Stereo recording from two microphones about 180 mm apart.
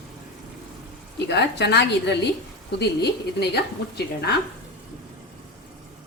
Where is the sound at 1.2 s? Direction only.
70° left (ahead or behind).